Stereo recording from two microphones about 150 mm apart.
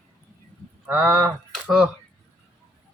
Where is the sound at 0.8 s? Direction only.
10° right (ahead or behind).